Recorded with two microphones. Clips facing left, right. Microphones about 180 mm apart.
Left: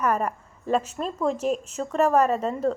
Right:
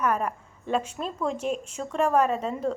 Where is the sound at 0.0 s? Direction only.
5° left (ahead or behind).